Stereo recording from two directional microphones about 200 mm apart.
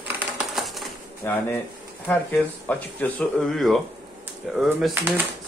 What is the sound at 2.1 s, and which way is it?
A man's voice, 10° left (ahead or behind).